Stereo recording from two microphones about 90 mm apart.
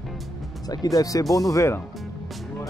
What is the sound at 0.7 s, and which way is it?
Speech, 45° left (ahead or behind).